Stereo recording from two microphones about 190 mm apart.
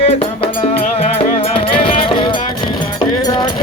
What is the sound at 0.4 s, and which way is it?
Music, 30° left (ahead or behind).